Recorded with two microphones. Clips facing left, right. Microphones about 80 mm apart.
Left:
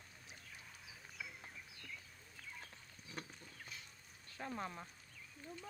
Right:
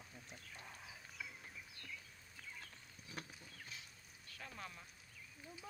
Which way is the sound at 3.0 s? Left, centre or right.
Centre.